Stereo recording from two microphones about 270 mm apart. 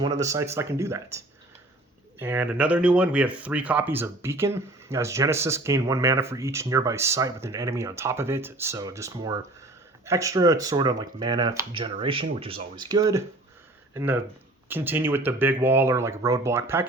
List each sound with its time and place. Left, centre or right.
0.0 s speech: centre